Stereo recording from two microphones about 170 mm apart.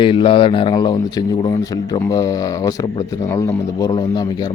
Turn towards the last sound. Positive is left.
turn(degrees=25)  # may be behind; listen again after turning